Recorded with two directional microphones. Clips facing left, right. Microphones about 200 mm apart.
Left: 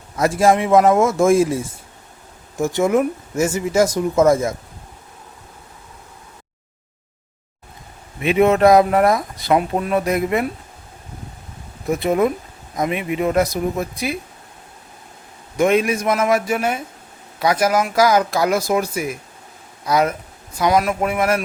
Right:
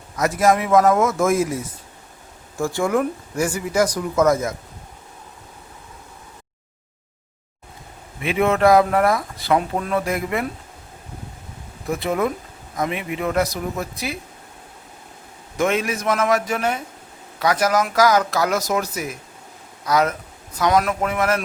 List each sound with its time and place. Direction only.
0.2 s speech: 30° left (ahead or behind)
8.2 s speech: 20° left (ahead or behind)
11.9 s speech: 15° left (ahead or behind)
15.5 s a man's voice: 15° left (ahead or behind)